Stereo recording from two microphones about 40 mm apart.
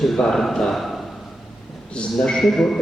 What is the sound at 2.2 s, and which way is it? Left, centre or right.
Speech, centre.